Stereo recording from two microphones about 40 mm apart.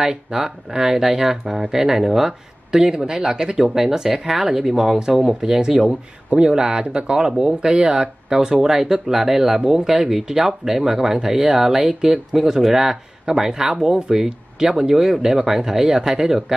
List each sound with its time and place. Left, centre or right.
0.0 s speech: centre